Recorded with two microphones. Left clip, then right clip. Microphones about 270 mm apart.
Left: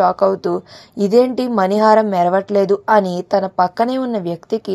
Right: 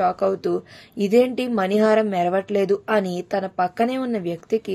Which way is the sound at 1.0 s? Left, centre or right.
Centre.